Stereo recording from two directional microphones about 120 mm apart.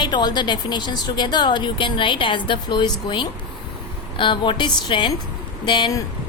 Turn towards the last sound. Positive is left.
turn(degrees=40)  # may be behind; listen again after turning